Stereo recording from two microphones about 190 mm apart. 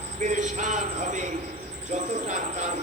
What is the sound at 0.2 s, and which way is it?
A man's voice, 40° right (ahead or behind).